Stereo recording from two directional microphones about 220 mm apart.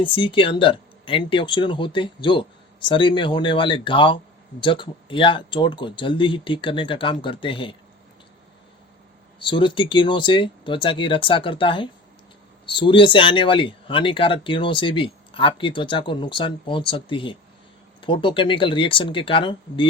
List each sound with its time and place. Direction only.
0.0 s speech: 20° left (ahead or behind)
9.4 s speech: 20° left (ahead or behind)